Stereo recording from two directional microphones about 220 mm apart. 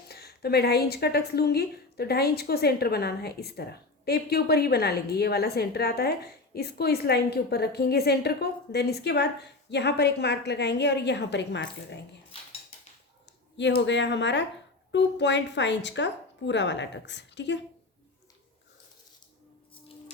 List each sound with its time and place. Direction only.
0.1 s a woman's voice: 45° left (ahead or behind)
13.6 s a woman's voice: 55° left (ahead or behind)